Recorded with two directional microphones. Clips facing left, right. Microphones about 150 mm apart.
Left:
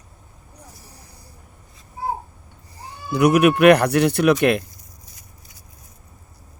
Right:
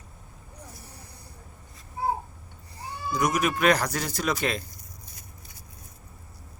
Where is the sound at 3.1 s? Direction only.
65° left (ahead or behind).